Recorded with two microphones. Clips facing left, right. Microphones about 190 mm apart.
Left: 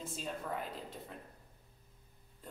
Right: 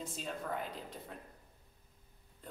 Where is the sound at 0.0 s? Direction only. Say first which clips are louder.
Even; centre (ahead or behind).